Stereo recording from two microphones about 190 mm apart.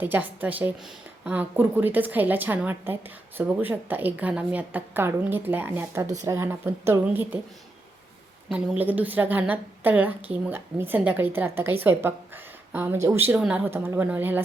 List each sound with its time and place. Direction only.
0.0 s a woman's voice: 10° right (ahead or behind)
8.4 s a woman's voice: 5° right (ahead or behind)